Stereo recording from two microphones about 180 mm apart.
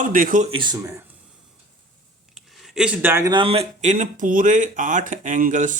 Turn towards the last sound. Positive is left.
turn(degrees=-45)  # may be behind; listen again after turning